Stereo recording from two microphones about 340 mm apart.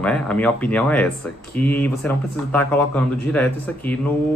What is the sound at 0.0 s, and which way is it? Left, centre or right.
Speech, centre.